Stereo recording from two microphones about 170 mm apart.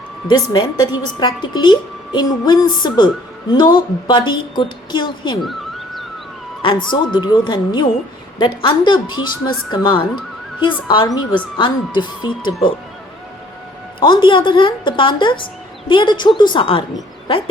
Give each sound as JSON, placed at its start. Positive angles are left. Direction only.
{"t": 0.3, "sound": "a woman's voice", "side_deg": 25}
{"t": 5.4, "sound": "music", "side_deg": 0}
{"t": 6.6, "sound": "a woman's voice", "side_deg": 30}
{"t": 14.0, "sound": "a woman's voice", "side_deg": 30}
{"t": 17.2, "sound": "owl", "side_deg": 30}